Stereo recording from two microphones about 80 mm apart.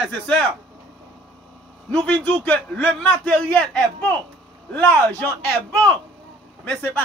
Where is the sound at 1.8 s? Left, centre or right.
Centre.